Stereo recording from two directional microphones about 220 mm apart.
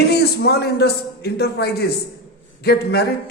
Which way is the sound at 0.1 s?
45° left (ahead or behind).